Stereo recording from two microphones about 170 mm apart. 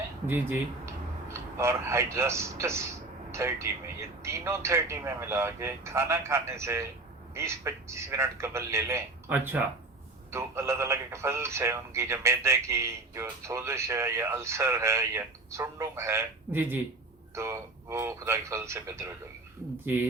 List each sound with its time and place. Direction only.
0.3 s speech: 15° right (ahead or behind)